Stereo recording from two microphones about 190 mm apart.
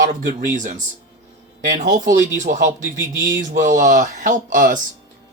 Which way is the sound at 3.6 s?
45° right (ahead or behind).